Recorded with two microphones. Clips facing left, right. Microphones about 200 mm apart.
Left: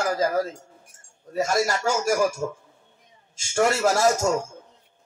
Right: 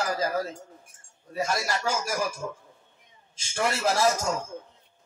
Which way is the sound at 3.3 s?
45° left (ahead or behind).